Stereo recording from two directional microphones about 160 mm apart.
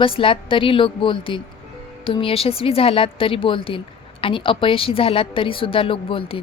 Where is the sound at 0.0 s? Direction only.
35° left (ahead or behind).